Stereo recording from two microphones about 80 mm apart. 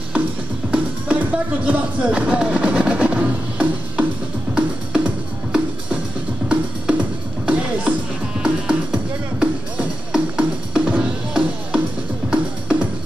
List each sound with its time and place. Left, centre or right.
0.7 s music: centre